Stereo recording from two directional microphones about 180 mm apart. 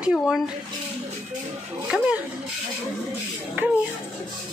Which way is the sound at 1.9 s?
5° right (ahead or behind).